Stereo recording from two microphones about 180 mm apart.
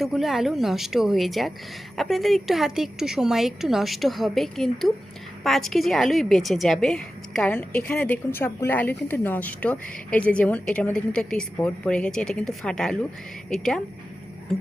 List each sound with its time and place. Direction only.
0.0 s a woman's voice: centre (ahead or behind)